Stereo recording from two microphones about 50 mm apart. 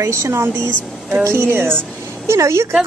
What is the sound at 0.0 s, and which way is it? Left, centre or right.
A woman's voice, right.